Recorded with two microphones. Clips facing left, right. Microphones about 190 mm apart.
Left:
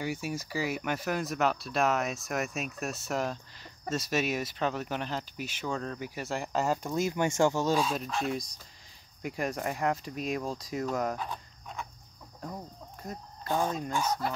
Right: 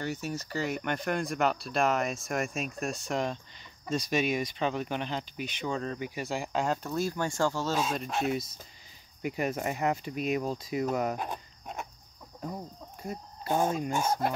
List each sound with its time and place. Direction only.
0.0 s speech: 10° left (ahead or behind)
9.2 s speech: 5° right (ahead or behind)
11.1 s insect: 50° right (ahead or behind)
12.4 s speech: 10° right (ahead or behind)